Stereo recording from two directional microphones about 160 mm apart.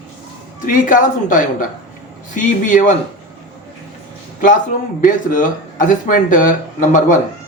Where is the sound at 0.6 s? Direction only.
55° left (ahead or behind).